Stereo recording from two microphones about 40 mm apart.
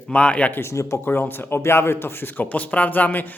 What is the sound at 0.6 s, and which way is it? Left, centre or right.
Speech, left.